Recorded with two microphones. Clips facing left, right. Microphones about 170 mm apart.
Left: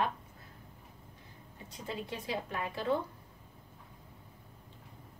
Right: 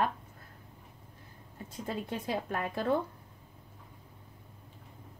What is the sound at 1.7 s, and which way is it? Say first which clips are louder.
A woman's voice: right 4 dB; 50° right (ahead or behind).